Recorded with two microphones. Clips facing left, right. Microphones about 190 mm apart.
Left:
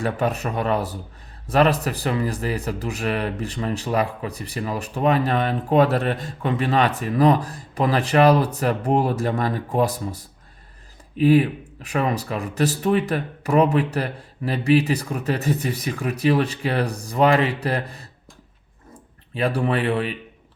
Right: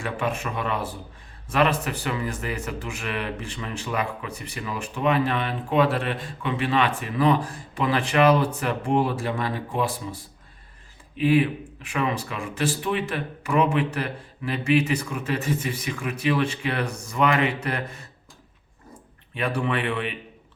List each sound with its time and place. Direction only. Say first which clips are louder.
0.0 s speech: left 5 dB; 40° left (ahead or behind)
19.3 s speech: left 4 dB; 35° left (ahead or behind)